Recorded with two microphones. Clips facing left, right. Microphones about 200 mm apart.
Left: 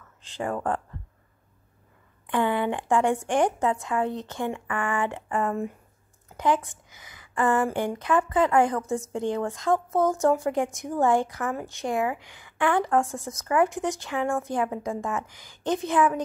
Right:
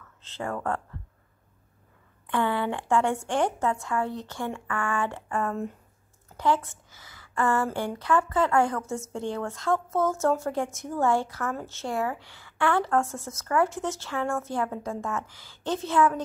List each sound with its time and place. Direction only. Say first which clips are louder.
0.2 s a woman's voice: left 3 dB; 15° left (ahead or behind)
2.2 s a woman's voice: left 2 dB; 15° left (ahead or behind)